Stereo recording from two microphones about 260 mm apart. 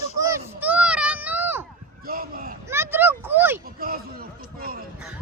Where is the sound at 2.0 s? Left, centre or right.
Right.